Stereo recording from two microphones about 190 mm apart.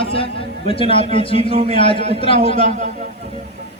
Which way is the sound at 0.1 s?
30° left (ahead or behind).